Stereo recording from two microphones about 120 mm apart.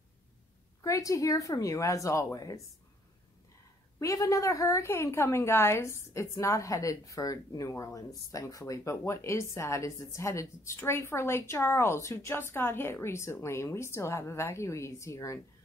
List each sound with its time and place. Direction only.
0.8 s a woman's voice: 25° left (ahead or behind)
4.0 s a woman's voice: 30° left (ahead or behind)